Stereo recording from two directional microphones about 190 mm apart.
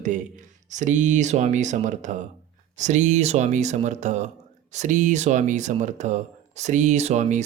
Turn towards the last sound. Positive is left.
turn(degrees=-40)  # may be behind; listen again after turning